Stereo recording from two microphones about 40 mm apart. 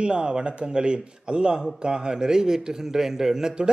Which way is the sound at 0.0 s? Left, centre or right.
Right.